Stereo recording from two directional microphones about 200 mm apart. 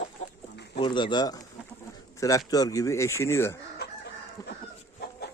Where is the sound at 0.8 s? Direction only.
25° left (ahead or behind).